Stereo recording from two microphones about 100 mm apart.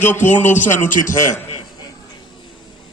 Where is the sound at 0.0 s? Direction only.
20° left (ahead or behind).